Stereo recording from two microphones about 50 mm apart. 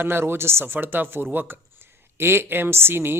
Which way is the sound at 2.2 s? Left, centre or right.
Right.